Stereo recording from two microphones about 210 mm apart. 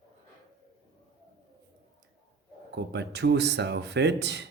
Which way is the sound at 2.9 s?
55° right (ahead or behind).